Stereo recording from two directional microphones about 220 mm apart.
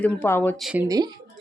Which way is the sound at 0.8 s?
15° right (ahead or behind).